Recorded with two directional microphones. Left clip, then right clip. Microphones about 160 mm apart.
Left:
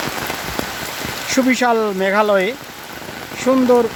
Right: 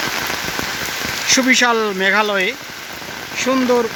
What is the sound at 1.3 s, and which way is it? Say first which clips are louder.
Speech: right 2 dB; 15° left (ahead or behind).